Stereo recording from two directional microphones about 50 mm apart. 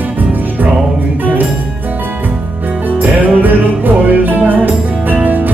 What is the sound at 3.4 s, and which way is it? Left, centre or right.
Music, right.